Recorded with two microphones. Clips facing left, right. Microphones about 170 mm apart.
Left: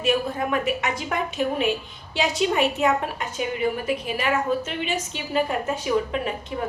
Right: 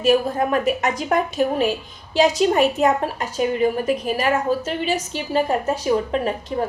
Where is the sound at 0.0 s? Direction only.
40° right (ahead or behind).